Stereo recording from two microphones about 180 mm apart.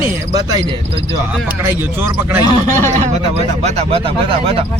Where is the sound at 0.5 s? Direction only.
20° right (ahead or behind).